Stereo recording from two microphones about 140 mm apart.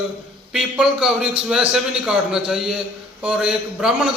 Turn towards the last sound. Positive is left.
turn(degrees=-5)  # may be behind; listen again after turning